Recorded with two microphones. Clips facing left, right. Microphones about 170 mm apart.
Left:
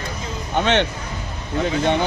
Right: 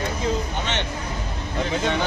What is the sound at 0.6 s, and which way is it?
Speech, 65° left (ahead or behind).